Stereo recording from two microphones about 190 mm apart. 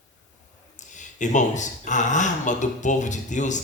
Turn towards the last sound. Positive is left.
turn(degrees=40)  # may be behind; listen again after turning